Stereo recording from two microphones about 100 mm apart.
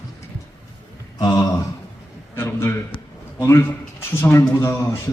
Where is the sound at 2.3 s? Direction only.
25° left (ahead or behind).